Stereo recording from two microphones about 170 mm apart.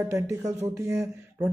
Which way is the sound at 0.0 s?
15° right (ahead or behind).